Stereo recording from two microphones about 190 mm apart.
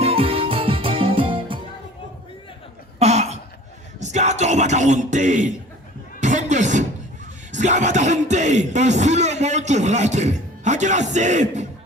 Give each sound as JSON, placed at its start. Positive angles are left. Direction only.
{"t": 0.0, "sound": "music", "side_deg": -30}
{"t": 3.0, "sound": "cough", "side_deg": -35}
{"t": 4.0, "sound": "speech", "side_deg": -40}
{"t": 6.1, "sound": "a sound", "side_deg": -40}
{"t": 7.5, "sound": "speech", "side_deg": -40}